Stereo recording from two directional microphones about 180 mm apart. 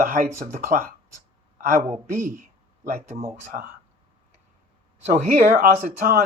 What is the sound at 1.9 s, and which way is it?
Speech, 45° right (ahead or behind).